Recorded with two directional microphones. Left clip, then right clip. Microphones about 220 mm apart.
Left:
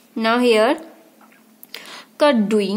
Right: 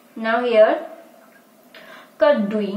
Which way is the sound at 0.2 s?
40° left (ahead or behind).